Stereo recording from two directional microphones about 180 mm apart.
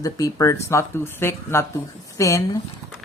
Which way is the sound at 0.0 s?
20° left (ahead or behind).